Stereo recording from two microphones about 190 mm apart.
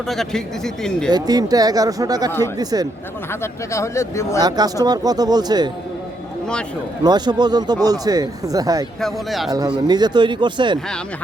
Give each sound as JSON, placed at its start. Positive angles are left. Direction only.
{"t": 0.1, "sound": "speech", "side_deg": 0}
{"t": 1.1, "sound": "speech", "side_deg": -20}
{"t": 3.4, "sound": "speech", "side_deg": 15}
{"t": 4.4, "sound": "speech", "side_deg": -20}
{"t": 7.0, "sound": "speech", "side_deg": -20}
{"t": 9.0, "sound": "speech", "side_deg": 0}
{"t": 9.5, "sound": "speech", "side_deg": -20}